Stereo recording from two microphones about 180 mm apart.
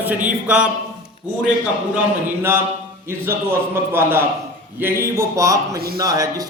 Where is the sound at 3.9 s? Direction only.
15° right (ahead or behind).